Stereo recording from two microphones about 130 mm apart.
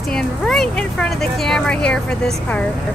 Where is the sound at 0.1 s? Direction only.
5° left (ahead or behind).